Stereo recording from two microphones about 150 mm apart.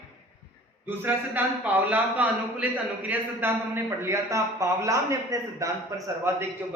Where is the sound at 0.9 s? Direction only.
10° right (ahead or behind).